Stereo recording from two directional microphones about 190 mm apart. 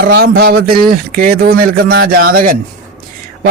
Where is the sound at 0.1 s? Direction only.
55° right (ahead or behind).